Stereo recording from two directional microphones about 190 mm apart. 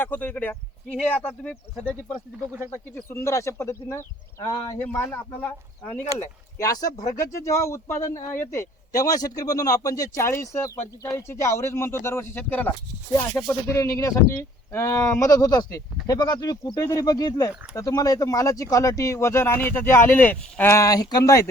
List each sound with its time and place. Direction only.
0.0 s speech: 10° left (ahead or behind)
2.9 s speech: 15° left (ahead or behind)
6.9 s speech: 40° left (ahead or behind)
7.2 s speech: 15° left (ahead or behind)